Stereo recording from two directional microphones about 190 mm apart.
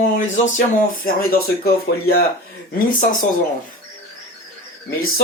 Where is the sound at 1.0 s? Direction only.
55° left (ahead or behind).